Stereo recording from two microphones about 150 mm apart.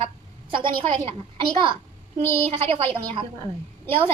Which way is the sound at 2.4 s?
40° right (ahead or behind).